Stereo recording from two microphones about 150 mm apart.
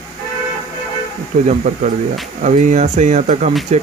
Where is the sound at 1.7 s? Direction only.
55° right (ahead or behind).